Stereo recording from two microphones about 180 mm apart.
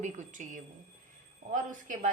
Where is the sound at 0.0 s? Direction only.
40° right (ahead or behind).